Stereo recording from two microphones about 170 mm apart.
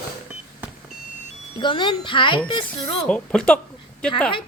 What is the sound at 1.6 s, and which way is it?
Speech, 25° left (ahead or behind).